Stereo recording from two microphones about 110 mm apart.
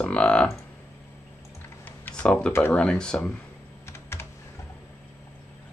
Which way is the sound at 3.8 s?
25° left (ahead or behind).